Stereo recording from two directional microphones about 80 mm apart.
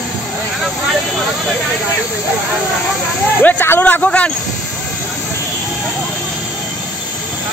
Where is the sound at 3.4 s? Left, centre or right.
Left.